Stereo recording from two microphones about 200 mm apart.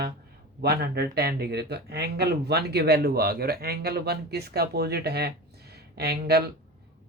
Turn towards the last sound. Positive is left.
turn(degrees=-50)  # may be behind; listen again after turning